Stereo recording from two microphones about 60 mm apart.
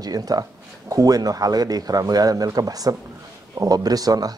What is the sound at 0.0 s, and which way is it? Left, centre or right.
Speech, right.